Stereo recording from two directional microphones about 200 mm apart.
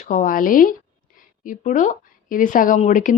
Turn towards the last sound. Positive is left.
turn(degrees=40)  # may be behind; listen again after turning